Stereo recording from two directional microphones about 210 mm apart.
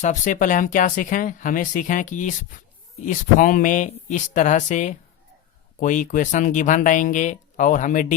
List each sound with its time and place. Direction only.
0.0 s speech: 35° left (ahead or behind)